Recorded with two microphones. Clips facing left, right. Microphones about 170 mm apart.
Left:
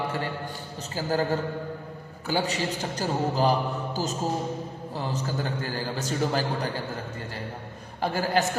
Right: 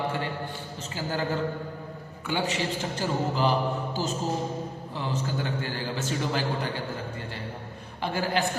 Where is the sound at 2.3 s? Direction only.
40° left (ahead or behind).